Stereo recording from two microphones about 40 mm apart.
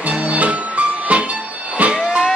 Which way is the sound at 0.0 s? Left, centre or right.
Right.